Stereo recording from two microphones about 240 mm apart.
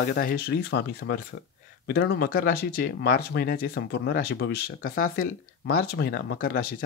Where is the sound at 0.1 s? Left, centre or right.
Left.